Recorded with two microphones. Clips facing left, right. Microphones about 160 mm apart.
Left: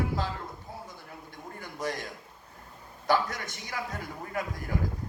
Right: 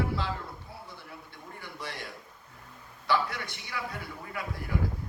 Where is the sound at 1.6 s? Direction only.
45° left (ahead or behind).